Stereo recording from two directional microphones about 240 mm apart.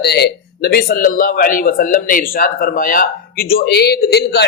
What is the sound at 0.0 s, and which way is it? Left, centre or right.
A man's voice, left.